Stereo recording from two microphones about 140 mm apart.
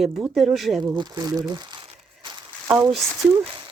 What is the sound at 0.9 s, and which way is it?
Speech, 30° right (ahead or behind).